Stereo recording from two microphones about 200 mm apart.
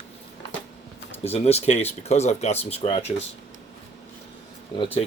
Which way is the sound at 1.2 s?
30° left (ahead or behind).